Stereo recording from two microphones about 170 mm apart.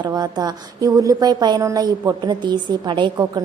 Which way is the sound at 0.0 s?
25° right (ahead or behind).